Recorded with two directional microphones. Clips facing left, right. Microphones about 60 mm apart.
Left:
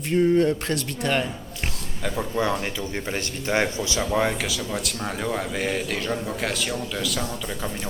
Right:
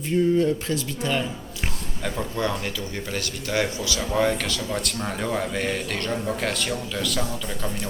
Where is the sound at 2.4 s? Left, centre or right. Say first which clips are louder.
Left 3 dB; centre.